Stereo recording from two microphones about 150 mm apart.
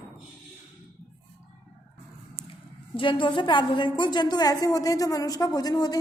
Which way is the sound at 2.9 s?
35° left (ahead or behind).